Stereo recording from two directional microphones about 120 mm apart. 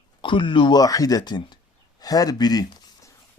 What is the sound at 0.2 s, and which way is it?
Speech, 45° left (ahead or behind).